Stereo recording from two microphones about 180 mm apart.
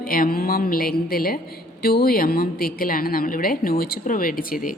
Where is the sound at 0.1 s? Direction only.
55° left (ahead or behind).